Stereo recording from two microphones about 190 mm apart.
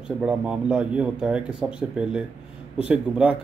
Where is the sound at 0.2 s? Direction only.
5° right (ahead or behind).